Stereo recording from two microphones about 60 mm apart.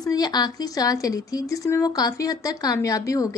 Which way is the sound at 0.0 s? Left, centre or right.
Left.